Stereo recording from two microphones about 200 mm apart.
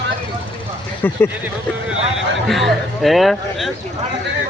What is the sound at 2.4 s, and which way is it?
Speech, centre (ahead or behind).